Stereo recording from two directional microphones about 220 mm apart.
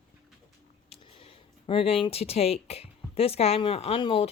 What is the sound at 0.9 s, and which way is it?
Speech, 25° left (ahead or behind).